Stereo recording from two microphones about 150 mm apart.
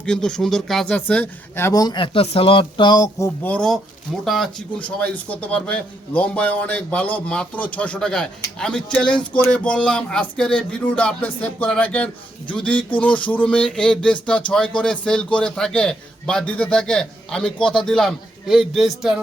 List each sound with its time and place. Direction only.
0.0 s speech: 5° left (ahead or behind); by 3.2 s 25° left (ahead or behind)
3.4 s speech: 5° left (ahead or behind)